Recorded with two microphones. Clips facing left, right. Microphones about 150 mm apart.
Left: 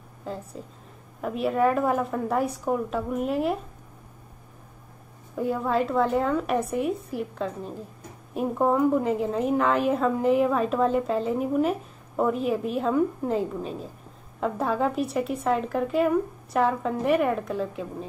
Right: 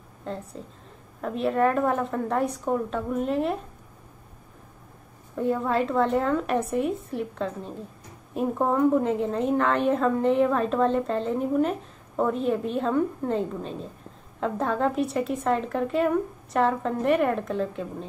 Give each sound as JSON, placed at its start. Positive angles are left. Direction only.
{"t": 0.2, "sound": "a woman's voice", "side_deg": 5}
{"t": 5.3, "sound": "a woman's voice", "side_deg": 0}